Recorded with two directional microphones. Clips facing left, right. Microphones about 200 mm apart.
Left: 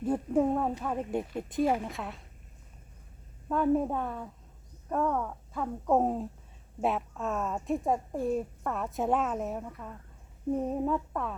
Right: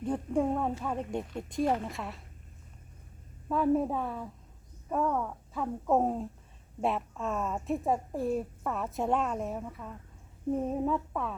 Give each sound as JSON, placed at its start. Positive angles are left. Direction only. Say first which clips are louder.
{"t": 0.0, "sound": "a woman's voice", "louder": "left 2 dB", "side_deg": 5}
{"t": 3.5, "sound": "a woman's voice", "louder": "even", "side_deg": 0}